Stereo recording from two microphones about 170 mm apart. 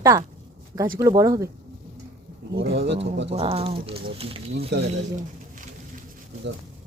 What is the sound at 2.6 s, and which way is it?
Speech, 90° right.